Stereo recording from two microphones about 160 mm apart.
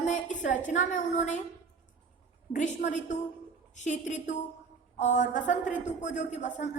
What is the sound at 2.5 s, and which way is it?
Speech, 50° left (ahead or behind).